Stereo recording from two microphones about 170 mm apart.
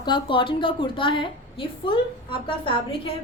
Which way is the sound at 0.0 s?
30° left (ahead or behind).